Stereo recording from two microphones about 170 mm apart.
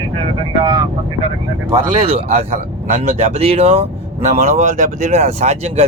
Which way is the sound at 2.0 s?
40° right (ahead or behind).